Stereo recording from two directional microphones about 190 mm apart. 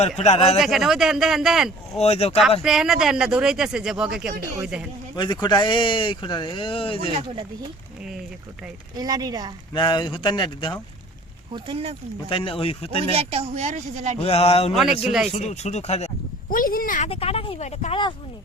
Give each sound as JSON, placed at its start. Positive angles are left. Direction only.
{"t": 0.2, "sound": "speech", "side_deg": 35}
{"t": 0.6, "sound": "speech", "side_deg": 0}
{"t": 2.0, "sound": "speech", "side_deg": 30}
{"t": 2.6, "sound": "speech", "side_deg": -5}
{"t": 5.1, "sound": "speech", "side_deg": 20}
{"t": 9.0, "sound": "speech", "side_deg": -20}
{"t": 9.7, "sound": "speech", "side_deg": 25}
{"t": 11.5, "sound": "speech", "side_deg": -30}
{"t": 12.3, "sound": "speech", "side_deg": 30}
{"t": 13.1, "sound": "speech", "side_deg": -30}
{"t": 14.2, "sound": "speech", "side_deg": 30}
{"t": 17.1, "sound": "speech", "side_deg": 30}